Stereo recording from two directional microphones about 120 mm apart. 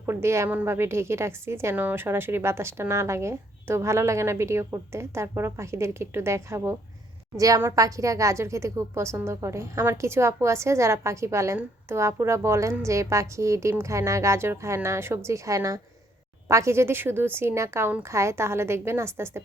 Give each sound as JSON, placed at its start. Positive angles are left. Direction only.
{"t": 0.0, "sound": "speech", "side_deg": -20}